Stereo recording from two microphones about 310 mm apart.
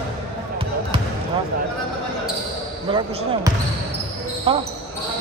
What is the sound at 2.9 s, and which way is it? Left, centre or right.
Basketball bounce, centre.